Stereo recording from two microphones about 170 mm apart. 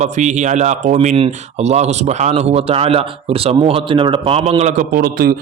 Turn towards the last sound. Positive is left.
turn(degrees=-60)  # may be behind; listen again after turning